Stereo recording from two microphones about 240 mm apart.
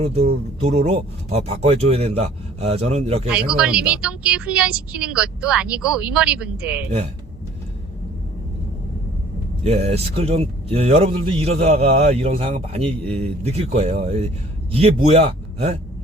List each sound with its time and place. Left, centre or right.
0.0 s speech: right
3.2 s a woman's voice: centre
9.6 s speech: right